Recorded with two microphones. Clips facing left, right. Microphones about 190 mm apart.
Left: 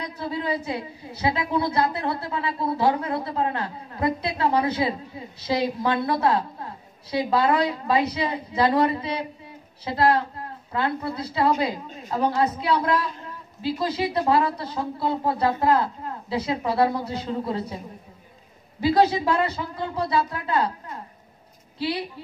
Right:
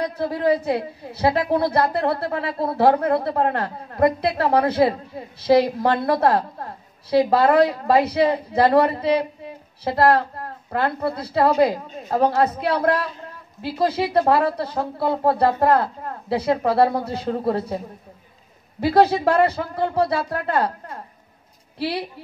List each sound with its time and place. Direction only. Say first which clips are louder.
0.0 s a woman's voice: right 7 dB; 60° right (ahead or behind)
18.8 s a woman's voice: right 3 dB; 60° right (ahead or behind)